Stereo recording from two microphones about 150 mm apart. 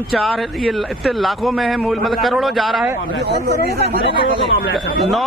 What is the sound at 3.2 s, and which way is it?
Speech, 90° right.